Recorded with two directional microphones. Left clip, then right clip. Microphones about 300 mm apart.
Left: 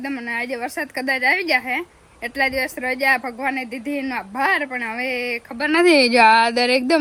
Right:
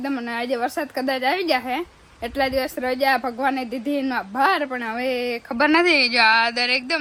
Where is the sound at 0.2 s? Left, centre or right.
Centre.